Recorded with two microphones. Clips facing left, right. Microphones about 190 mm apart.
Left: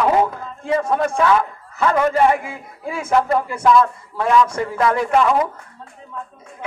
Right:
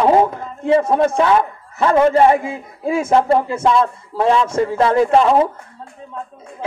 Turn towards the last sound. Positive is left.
turn(degrees=-30)  # may be behind; listen again after turning